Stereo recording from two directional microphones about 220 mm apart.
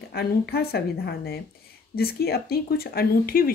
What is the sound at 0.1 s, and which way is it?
Speech, 45° left (ahead or behind).